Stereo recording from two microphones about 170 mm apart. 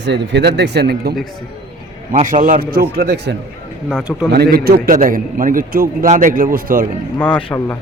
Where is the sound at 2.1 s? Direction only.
50° right (ahead or behind).